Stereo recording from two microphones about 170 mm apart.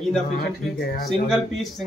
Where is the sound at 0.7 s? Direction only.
70° left (ahead or behind).